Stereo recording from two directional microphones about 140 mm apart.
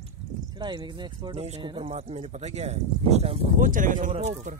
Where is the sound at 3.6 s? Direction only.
70° right (ahead or behind).